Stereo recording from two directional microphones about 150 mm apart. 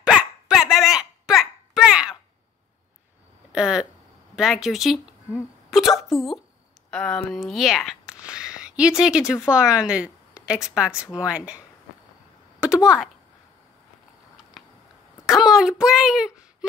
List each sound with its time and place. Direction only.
0.0 s hiccup: 5° right (ahead or behind)
3.5 s a woman's voice: 5° right (ahead or behind)
12.5 s a sound: 5° right (ahead or behind)
15.2 s a woman's voice: centre (ahead or behind)